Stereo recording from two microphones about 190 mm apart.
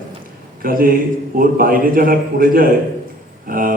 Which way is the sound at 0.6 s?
50° right (ahead or behind).